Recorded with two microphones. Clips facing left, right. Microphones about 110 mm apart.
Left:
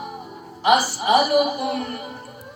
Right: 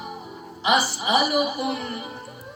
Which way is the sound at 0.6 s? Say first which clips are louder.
Left 4 dB; 50° left (ahead or behind).